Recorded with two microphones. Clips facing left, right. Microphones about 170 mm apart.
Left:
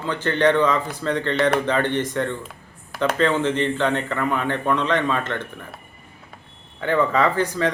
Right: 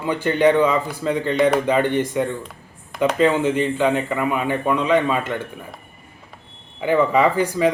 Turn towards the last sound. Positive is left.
turn(degrees=-10)  # may be behind; listen again after turning